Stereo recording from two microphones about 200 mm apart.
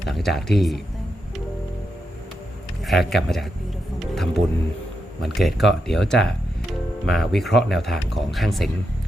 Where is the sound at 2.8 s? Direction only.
Centre (ahead or behind).